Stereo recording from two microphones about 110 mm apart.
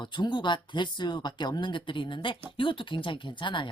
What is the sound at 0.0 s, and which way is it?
Speech, 45° left (ahead or behind).